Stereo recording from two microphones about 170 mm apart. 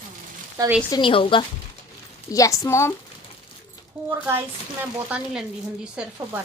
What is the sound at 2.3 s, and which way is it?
Speech, 20° left (ahead or behind).